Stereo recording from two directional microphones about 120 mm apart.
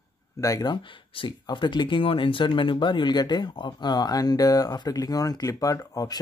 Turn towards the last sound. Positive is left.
turn(degrees=30)  # may be behind; listen again after turning